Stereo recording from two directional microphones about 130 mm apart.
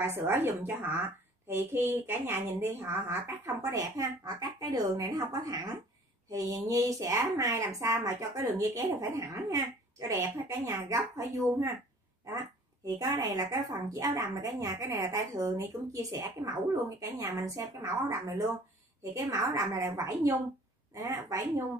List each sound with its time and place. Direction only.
0.0 s a woman's voice: 20° right (ahead or behind)
13.1 s a woman's voice: 25° right (ahead or behind)
19.1 s a woman's voice: 25° right (ahead or behind)